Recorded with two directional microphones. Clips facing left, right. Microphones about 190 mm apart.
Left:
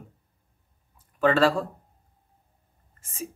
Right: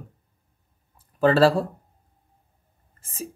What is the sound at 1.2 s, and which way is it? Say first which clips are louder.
Speech: right 3 dB; 35° right (ahead or behind).